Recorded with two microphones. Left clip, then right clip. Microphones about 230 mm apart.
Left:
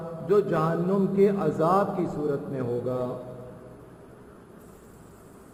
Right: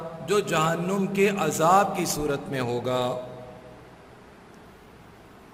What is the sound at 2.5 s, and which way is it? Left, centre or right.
Mantra, right.